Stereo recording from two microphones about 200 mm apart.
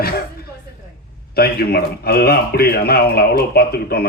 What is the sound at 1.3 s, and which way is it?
A man's voice, 50° left (ahead or behind).